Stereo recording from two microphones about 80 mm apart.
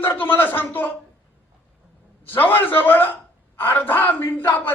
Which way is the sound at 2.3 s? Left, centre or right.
Left.